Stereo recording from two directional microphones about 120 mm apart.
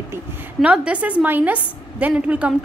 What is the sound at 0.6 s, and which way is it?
A woman's voice, 10° right (ahead or behind).